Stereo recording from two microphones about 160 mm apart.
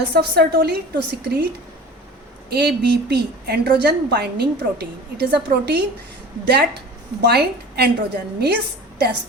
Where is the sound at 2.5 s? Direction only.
90° right.